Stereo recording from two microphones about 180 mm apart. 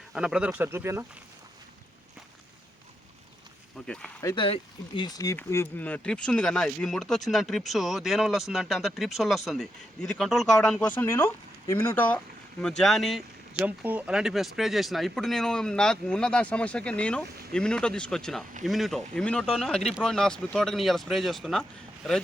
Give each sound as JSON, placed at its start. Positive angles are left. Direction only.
{"t": 0.1, "sound": "speech", "side_deg": -5}
{"t": 3.8, "sound": "speech", "side_deg": 5}
{"t": 4.2, "sound": "speech", "side_deg": 20}
{"t": 4.4, "sound": "speech", "side_deg": 30}